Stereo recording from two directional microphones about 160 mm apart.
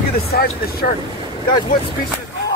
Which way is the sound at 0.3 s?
75° left (ahead or behind).